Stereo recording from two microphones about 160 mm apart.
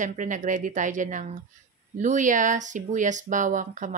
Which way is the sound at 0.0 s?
55° right (ahead or behind).